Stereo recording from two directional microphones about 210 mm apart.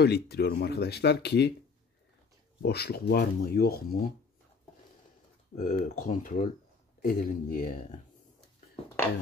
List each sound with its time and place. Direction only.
0.0 s speech: 50° left (ahead or behind)
2.6 s speech: 50° left (ahead or behind)
5.6 s speech: 35° left (ahead or behind)